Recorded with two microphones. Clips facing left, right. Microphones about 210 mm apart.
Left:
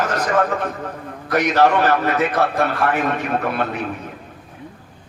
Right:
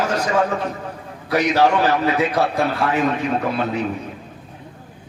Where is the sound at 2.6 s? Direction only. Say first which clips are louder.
Even; 60° left (ahead or behind).